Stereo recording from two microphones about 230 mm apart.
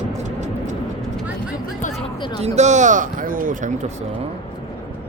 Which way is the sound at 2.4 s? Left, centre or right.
Right.